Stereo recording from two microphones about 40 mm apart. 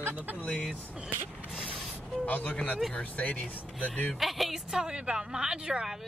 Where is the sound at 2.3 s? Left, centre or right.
Left.